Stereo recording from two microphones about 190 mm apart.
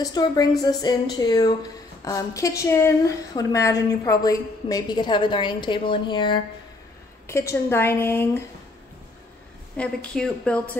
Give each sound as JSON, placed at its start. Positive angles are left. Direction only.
{"t": 0.0, "sound": "a woman's voice", "side_deg": 20}
{"t": 7.2, "sound": "a woman's voice", "side_deg": 15}
{"t": 9.8, "sound": "a woman's voice", "side_deg": 5}